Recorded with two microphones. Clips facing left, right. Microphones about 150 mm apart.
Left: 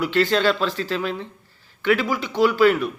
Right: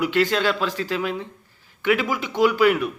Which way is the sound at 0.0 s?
15° right (ahead or behind).